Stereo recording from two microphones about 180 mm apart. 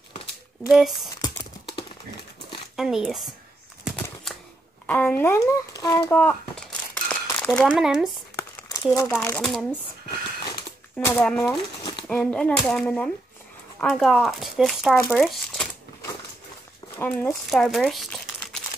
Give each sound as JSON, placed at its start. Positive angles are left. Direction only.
{"t": 0.7, "sound": "speech", "side_deg": 0}
{"t": 1.2, "sound": "typing", "side_deg": 25}
{"t": 2.7, "sound": "speech", "side_deg": 0}
{"t": 3.8, "sound": "a sound", "side_deg": 0}
{"t": 4.8, "sound": "speech", "side_deg": 10}
{"t": 6.1, "sound": "speech", "side_deg": 10}
{"t": 7.1, "sound": "crumpling", "side_deg": 10}
{"t": 7.8, "sound": "speech", "side_deg": -5}
{"t": 8.6, "sound": "crumpling", "side_deg": 20}
{"t": 9.1, "sound": "speech", "side_deg": 10}
{"t": 11.1, "sound": "speech", "side_deg": 5}
{"t": 16.9, "sound": "speech", "side_deg": 10}